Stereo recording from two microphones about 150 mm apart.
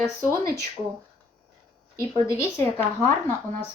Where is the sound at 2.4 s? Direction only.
15° left (ahead or behind).